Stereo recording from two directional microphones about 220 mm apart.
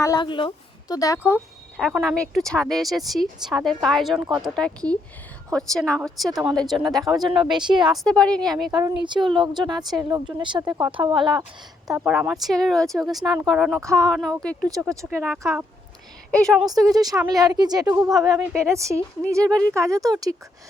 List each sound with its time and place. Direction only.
0.0 s speech: 20° left (ahead or behind); by 7.5 s centre (ahead or behind)
7.5 s speech: 20° right (ahead or behind)
7.9 s speech: centre (ahead or behind)
9.0 s a woman's voice: 20° right (ahead or behind)
11.9 s speech: 5° right (ahead or behind)
14.7 s a woman's voice: 15° right (ahead or behind)
15.0 s speech: centre (ahead or behind)
16.6 s a woman's voice: 15° right (ahead or behind)